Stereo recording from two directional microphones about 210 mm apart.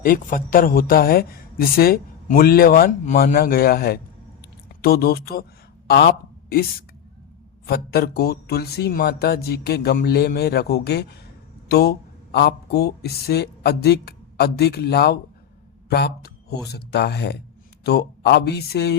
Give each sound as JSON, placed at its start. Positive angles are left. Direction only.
{"t": 0.0, "sound": "speech", "side_deg": 40}